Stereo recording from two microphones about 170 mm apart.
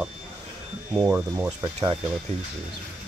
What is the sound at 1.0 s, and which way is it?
Speech, 10° right (ahead or behind).